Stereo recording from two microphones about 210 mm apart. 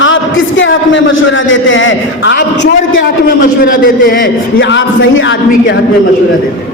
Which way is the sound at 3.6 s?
40° left (ahead or behind).